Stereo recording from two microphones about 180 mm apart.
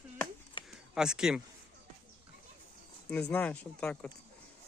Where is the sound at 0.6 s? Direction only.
25° left (ahead or behind).